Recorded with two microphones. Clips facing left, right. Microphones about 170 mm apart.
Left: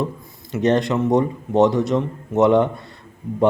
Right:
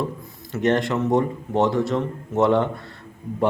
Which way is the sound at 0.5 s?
20° left (ahead or behind).